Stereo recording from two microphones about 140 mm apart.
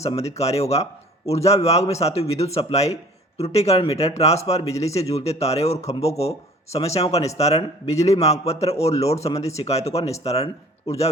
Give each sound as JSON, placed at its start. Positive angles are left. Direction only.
{"t": 0.2, "sound": "a man's voice", "side_deg": 50}